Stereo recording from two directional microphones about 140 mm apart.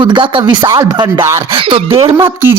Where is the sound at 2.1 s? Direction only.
15° right (ahead or behind).